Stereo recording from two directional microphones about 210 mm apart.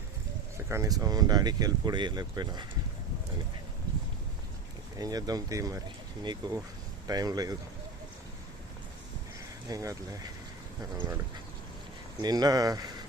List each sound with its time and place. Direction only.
0.5 s speech: 15° right (ahead or behind)
4.9 s speech: 15° right (ahead or behind)
9.6 s speech: 15° right (ahead or behind)
12.2 s speech: 20° right (ahead or behind)